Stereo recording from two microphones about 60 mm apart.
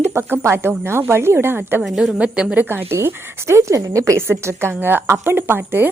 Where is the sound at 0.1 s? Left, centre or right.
Right.